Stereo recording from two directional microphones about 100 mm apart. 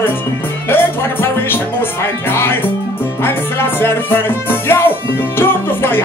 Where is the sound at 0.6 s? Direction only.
20° left (ahead or behind).